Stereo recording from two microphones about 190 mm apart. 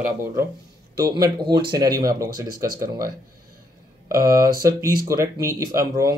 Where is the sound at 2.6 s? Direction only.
45° right (ahead or behind).